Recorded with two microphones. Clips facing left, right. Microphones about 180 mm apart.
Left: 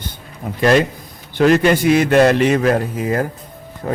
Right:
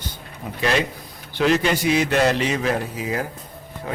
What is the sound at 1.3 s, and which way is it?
A man's voice, 50° left (ahead or behind).